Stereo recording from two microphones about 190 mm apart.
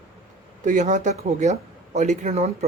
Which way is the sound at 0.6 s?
40° right (ahead or behind).